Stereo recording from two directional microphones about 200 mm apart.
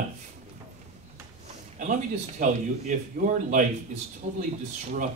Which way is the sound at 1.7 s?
40° right (ahead or behind).